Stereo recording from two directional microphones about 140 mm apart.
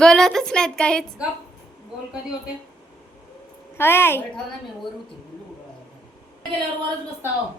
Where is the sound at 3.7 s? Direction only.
15° left (ahead or behind).